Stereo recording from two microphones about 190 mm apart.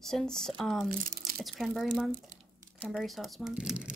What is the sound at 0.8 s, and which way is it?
Speech, 45° right (ahead or behind).